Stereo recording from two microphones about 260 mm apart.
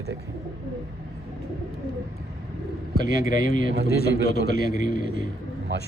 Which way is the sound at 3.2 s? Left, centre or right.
Left.